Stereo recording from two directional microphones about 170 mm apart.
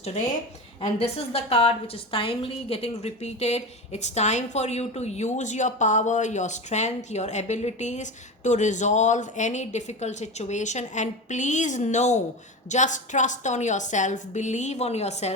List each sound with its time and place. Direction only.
0.8 s a woman's voice: 35° left (ahead or behind)